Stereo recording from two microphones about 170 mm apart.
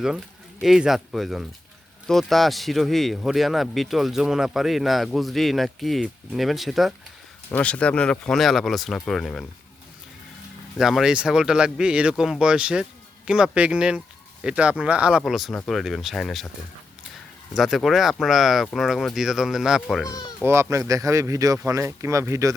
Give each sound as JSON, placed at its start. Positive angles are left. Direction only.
{"t": 0.6, "sound": "speech", "side_deg": 0}
{"t": 10.8, "sound": "speech", "side_deg": 0}
{"t": 17.5, "sound": "speech", "side_deg": 0}
{"t": 20.1, "sound": "speech", "side_deg": 25}
{"t": 20.4, "sound": "speech", "side_deg": -15}